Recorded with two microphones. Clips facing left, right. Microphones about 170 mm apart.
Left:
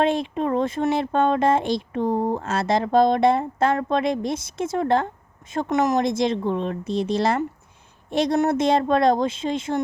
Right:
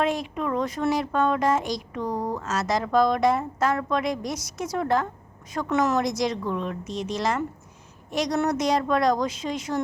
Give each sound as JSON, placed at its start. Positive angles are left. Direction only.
{"t": 0.0, "sound": "speech", "side_deg": 30}
{"t": 5.8, "sound": "speech", "side_deg": 20}